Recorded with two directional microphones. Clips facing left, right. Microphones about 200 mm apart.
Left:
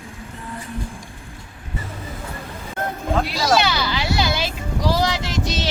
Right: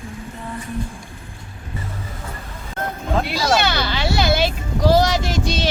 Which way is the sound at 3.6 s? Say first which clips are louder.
Right 1 dB; 60° right (ahead or behind).